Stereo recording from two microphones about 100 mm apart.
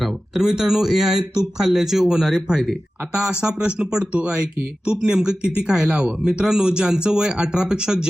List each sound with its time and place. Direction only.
0.0 s speech: 5° right (ahead or behind)